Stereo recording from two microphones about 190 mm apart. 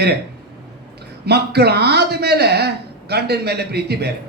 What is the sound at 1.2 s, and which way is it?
Speech, 60° right (ahead or behind).